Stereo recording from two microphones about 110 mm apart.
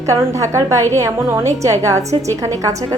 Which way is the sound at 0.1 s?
25° right (ahead or behind).